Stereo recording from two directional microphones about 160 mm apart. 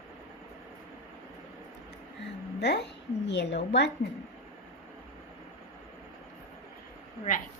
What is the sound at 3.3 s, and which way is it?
Speech, 90° left.